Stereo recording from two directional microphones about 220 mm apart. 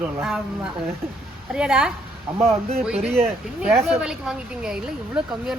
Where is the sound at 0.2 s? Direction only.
5° right (ahead or behind).